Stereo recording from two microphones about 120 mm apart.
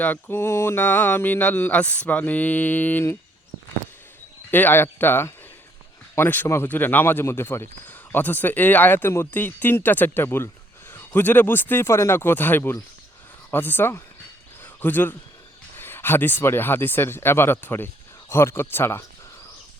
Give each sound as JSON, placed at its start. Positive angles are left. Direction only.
{"t": 0.0, "sound": "speech", "side_deg": 15}
{"t": 4.5, "sound": "speech", "side_deg": 15}
{"t": 14.6, "sound": "a sound", "side_deg": 15}
{"t": 15.8, "sound": "speech", "side_deg": 20}